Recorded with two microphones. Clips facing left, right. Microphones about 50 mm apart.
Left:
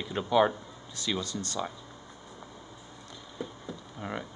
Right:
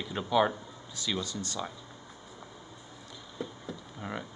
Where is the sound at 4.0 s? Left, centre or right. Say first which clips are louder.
Left 2 dB; centre.